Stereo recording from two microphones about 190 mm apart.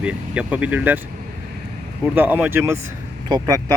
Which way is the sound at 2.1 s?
10° right (ahead or behind).